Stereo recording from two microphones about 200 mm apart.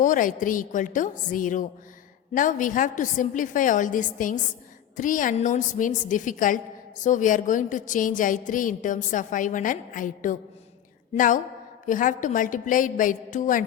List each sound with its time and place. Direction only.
0.0 s a woman's voice: 40° left (ahead or behind)